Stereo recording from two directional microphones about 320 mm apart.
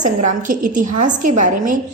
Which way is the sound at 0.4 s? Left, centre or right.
Right.